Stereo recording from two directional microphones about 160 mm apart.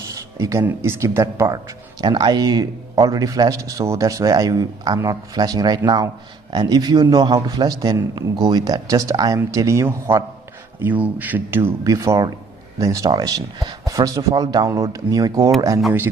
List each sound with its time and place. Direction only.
0.1 s speech: 20° right (ahead or behind)